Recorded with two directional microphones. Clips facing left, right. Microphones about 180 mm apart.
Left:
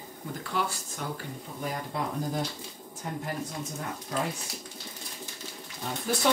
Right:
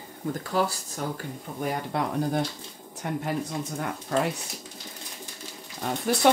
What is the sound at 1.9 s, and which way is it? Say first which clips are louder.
Speech: right 5 dB; 70° right (ahead or behind).